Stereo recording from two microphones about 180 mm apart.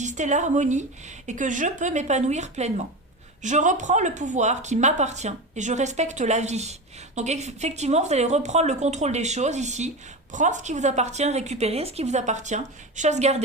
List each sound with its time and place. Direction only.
0.0 s speech: 40° right (ahead or behind)